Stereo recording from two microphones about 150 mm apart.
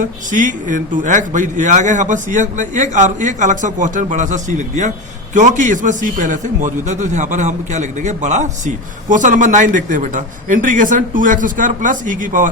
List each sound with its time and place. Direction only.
0.0 s a man's voice: 60° right (ahead or behind)